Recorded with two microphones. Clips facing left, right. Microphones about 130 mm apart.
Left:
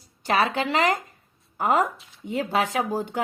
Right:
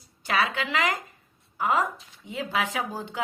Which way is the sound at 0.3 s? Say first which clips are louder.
Left 4 dB; 40° left (ahead or behind).